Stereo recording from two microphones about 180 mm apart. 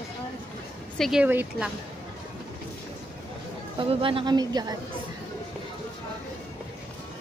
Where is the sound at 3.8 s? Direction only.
30° right (ahead or behind).